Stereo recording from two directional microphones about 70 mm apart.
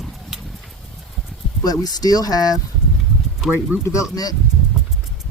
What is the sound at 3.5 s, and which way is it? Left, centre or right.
Speech, right.